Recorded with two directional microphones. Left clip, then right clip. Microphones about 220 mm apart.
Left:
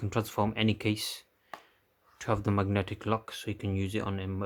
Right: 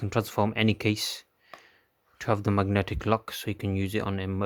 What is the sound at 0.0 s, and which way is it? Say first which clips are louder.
Speech: right 4 dB; 25° right (ahead or behind).